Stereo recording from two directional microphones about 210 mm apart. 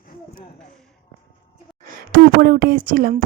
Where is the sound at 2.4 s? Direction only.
45° right (ahead or behind).